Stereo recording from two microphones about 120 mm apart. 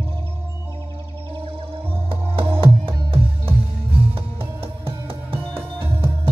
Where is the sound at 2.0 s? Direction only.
50° right (ahead or behind).